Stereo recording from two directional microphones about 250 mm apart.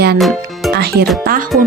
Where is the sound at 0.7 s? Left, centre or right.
Right.